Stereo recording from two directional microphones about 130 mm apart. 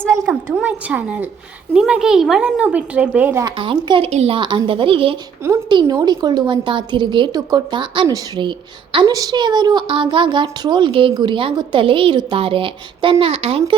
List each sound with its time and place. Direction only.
0.5 s a woman's voice: 10° right (ahead or behind)
3.4 s a woman's voice: 35° right (ahead or behind)
4.1 s a woman's voice: 55° right (ahead or behind)
4.4 s a woman's voice: 40° right (ahead or behind)